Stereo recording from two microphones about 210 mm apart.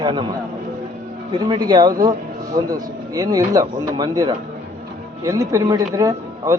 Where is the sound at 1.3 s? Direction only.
20° right (ahead or behind).